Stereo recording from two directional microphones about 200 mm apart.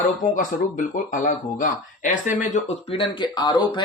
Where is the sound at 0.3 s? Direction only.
40° left (ahead or behind).